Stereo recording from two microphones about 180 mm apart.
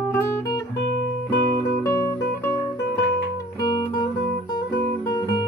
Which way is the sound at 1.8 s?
15° left (ahead or behind).